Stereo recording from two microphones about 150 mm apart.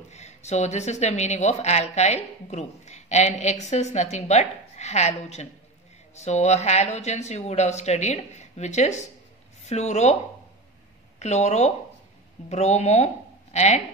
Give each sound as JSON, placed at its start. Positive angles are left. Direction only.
{"t": 0.1, "sound": "a woman's voice", "side_deg": 50}
{"t": 11.1, "sound": "a woman's voice", "side_deg": 50}